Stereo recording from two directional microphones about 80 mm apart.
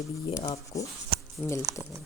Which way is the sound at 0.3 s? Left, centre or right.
Left.